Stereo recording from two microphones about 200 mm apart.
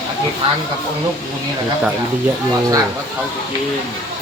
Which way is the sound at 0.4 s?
25° right (ahead or behind).